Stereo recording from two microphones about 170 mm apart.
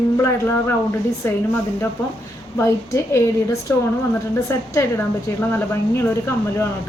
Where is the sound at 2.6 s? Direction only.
15° left (ahead or behind).